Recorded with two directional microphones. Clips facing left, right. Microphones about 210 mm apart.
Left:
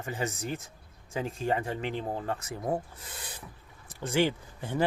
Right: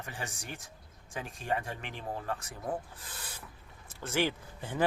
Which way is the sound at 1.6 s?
25° left (ahead or behind).